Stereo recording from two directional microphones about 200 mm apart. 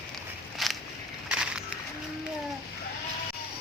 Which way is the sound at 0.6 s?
Centre (ahead or behind).